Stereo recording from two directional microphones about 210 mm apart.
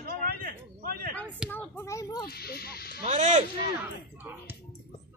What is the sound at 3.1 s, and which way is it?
Speech, 35° right (ahead or behind).